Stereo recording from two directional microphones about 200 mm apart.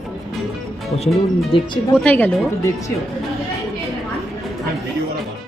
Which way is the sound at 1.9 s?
5° left (ahead or behind).